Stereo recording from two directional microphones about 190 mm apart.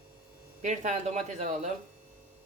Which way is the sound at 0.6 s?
40° right (ahead or behind).